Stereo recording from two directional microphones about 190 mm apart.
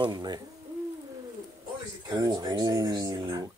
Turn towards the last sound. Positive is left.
turn(degrees=-20)  # may be behind; listen again after turning